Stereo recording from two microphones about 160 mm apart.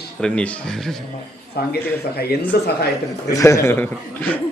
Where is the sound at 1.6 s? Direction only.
75° left (ahead or behind).